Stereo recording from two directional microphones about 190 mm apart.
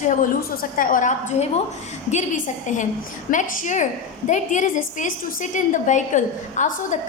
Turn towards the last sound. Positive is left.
turn(degrees=40)  # may be behind; listen again after turning